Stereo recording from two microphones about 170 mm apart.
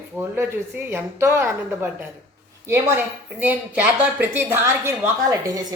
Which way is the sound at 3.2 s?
10° right (ahead or behind).